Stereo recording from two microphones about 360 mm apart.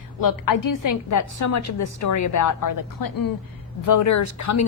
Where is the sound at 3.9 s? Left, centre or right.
Left.